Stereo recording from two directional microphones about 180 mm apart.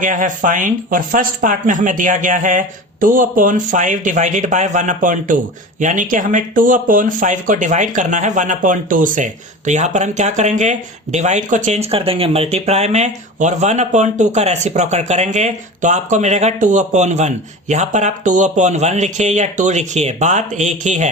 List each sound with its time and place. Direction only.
0.0 s speech: 45° right (ahead or behind)